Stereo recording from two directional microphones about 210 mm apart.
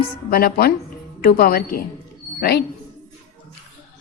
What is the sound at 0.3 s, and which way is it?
A woman's voice, 45° left (ahead or behind).